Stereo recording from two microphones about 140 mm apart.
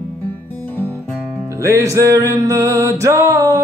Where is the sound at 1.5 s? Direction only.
20° right (ahead or behind).